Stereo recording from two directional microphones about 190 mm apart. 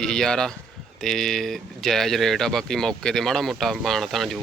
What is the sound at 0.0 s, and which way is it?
Speech, 5° left (ahead or behind).